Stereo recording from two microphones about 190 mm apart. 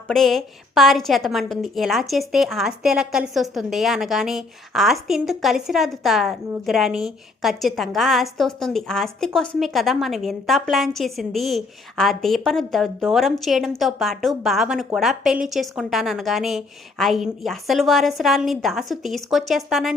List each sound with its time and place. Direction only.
0.1 s a woman's voice: centre (ahead or behind)